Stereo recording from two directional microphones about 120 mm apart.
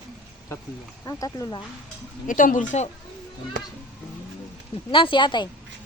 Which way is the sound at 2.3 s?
90° left.